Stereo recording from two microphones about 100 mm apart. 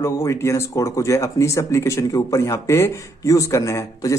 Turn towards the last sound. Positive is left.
turn(degrees=30)  # may be behind; listen again after turning